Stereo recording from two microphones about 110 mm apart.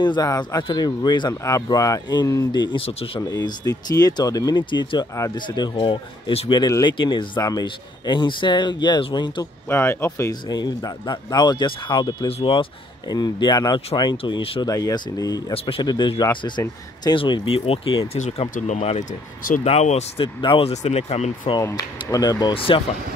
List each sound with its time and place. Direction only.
0.0 s speech: 40° left (ahead or behind)
1.4 s speech: 30° left (ahead or behind)
2.8 s speech: 65° left (ahead or behind)
3.2 s speech: 35° left (ahead or behind)
9.7 s speech: 20° left (ahead or behind)
10.5 s speech: 40° left (ahead or behind)
12.3 s speech: 55° left (ahead or behind)
13.1 s speech: 40° left (ahead or behind)
14.6 s speech: 35° left (ahead or behind)
15.5 s speech: 55° left (ahead or behind); by 20.2 s 75° left (ahead or behind)
20.4 s speech: 50° left (ahead or behind)
20.7 s speech: 80° left
21.5 s speech: 30° left (ahead or behind)
22.7 s speech: 50° left (ahead or behind)